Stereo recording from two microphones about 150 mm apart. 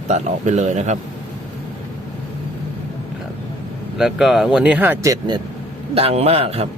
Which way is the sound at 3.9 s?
5° right (ahead or behind).